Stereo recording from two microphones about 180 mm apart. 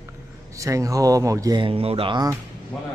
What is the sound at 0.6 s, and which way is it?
Speech, 15° right (ahead or behind).